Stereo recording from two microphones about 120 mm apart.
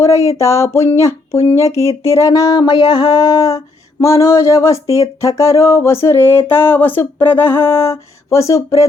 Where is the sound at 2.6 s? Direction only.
50° left (ahead or behind).